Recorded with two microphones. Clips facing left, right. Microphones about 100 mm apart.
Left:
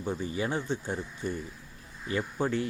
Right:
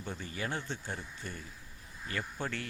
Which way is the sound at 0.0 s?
15° left (ahead or behind).